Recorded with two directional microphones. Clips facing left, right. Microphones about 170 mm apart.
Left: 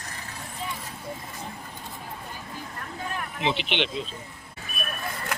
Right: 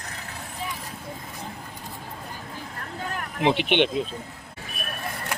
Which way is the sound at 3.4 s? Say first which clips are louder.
Right 7 dB; 50° right (ahead or behind).